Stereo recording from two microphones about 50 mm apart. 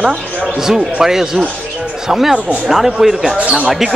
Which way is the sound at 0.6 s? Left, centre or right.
Centre.